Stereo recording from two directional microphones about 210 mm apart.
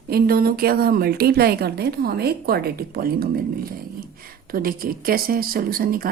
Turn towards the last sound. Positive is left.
turn(degrees=-45)  # may be behind; listen again after turning